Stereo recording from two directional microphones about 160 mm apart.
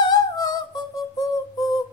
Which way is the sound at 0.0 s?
25° left (ahead or behind).